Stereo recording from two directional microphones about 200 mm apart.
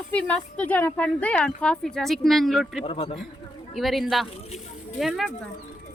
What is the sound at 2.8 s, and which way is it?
Speech, 30° left (ahead or behind).